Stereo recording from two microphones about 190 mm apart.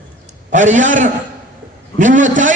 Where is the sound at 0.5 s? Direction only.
40° right (ahead or behind).